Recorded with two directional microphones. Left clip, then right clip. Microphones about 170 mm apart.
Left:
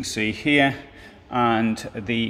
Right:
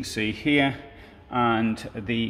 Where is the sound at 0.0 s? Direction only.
15° left (ahead or behind).